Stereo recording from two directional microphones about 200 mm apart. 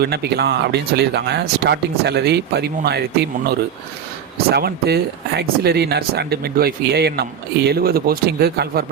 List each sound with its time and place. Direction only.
0.0 s speech: 55° right (ahead or behind)